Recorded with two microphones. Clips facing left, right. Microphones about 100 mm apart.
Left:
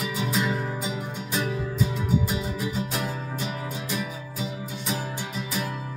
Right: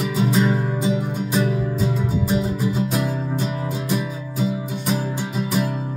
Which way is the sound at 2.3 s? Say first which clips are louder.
Right 7 dB; 30° right (ahead or behind).